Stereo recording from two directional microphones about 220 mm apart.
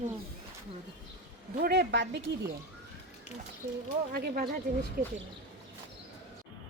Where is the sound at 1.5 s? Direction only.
45° right (ahead or behind).